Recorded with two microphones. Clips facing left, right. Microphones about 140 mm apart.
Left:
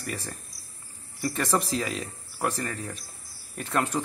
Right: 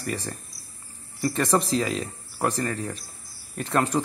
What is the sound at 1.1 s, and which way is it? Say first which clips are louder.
Speech: right 4 dB; 30° right (ahead or behind).